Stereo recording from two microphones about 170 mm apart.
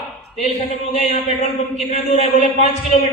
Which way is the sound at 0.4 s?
40° left (ahead or behind).